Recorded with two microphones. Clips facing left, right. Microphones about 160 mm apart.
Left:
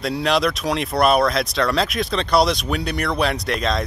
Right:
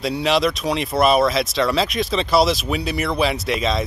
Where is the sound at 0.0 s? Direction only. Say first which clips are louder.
Right 1 dB; centre (ahead or behind).